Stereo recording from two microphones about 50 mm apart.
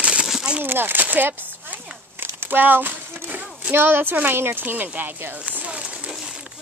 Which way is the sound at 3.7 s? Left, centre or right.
Right.